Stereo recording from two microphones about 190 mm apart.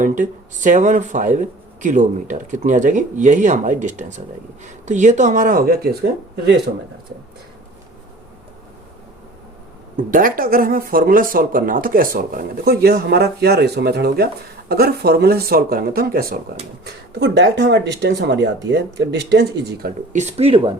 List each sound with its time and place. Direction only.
0.0 s speech: 40° right (ahead or behind); by 6.6 s 60° right (ahead or behind)
10.1 s speech: 45° right (ahead or behind)
20.1 s speech: 35° right (ahead or behind)